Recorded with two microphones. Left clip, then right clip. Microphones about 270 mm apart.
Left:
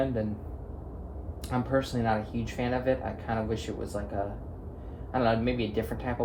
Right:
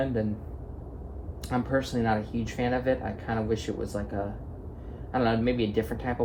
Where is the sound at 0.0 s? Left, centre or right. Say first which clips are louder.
Right 1 dB; right.